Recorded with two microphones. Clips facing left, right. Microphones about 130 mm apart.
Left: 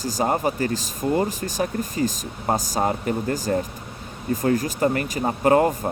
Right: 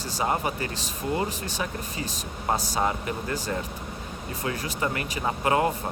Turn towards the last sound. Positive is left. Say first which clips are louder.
# left 6 dB
turn(degrees=45)  # may be behind; listen again after turning